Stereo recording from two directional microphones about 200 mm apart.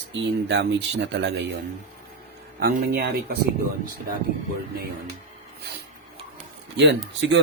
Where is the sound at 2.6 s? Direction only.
50° right (ahead or behind).